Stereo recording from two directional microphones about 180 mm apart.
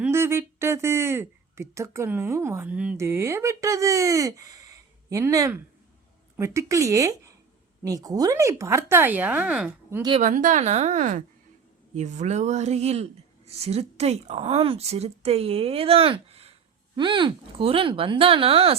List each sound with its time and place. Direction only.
0.0 s speech: 15° right (ahead or behind)
10.2 s a woman's voice: 45° right (ahead or behind)